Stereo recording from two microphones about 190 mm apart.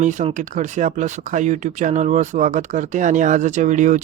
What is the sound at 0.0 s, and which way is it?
Speech, 40° right (ahead or behind).